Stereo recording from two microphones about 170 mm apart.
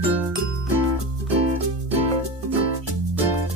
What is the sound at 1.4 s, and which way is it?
Music, 35° right (ahead or behind).